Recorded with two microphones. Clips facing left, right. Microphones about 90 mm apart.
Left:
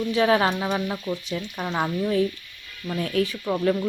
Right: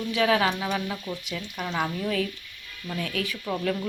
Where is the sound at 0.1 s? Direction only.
35° left (ahead or behind).